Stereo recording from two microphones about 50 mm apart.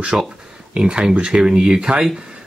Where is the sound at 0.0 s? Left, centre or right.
Centre.